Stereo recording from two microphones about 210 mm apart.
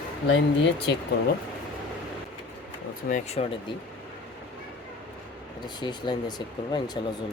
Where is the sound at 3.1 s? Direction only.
35° left (ahead or behind).